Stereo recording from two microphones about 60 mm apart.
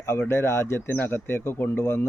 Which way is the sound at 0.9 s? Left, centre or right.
Left.